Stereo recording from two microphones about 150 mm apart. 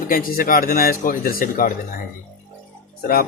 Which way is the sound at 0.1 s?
65° left (ahead or behind).